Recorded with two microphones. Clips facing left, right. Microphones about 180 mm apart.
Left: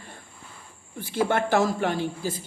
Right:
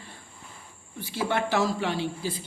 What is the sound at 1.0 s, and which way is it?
Speech, 50° left (ahead or behind).